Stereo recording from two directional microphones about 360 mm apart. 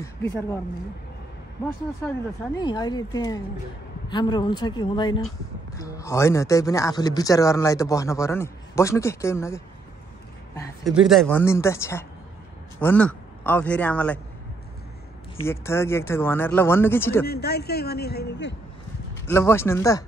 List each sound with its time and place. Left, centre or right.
0.0 s speech: centre
2.5 s a woman's voice: centre
15.3 s speech: centre
17.3 s speech: left
19.2 s speech: centre